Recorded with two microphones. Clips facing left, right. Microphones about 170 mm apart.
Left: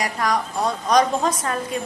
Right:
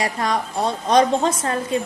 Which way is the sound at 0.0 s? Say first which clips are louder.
Right 1 dB; 25° right (ahead or behind).